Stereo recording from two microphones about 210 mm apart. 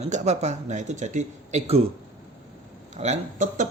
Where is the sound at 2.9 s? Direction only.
35° right (ahead or behind).